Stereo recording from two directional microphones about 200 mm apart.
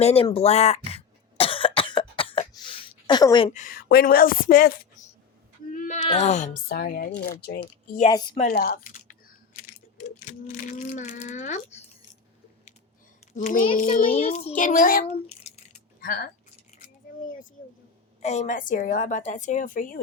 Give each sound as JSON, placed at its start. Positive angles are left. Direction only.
{"t": 0.0, "sound": "a woman's voice", "side_deg": 30}
{"t": 0.3, "sound": "cough", "side_deg": 35}
{"t": 3.5, "sound": "a woman's voice", "side_deg": 45}
{"t": 5.7, "sound": "a sound", "side_deg": 40}
{"t": 6.1, "sound": "a woman's voice", "side_deg": 35}
{"t": 8.0, "sound": "speech", "side_deg": 20}
{"t": 8.4, "sound": "typing", "side_deg": 45}
{"t": 13.3, "sound": "a woman's voice", "side_deg": 40}
{"t": 15.0, "sound": "a sound", "side_deg": 35}
{"t": 16.0, "sound": "a sound", "side_deg": 50}
{"t": 18.2, "sound": "a woman's voice", "side_deg": 35}